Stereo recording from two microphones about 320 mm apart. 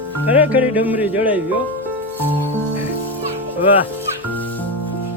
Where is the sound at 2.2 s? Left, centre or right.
Centre.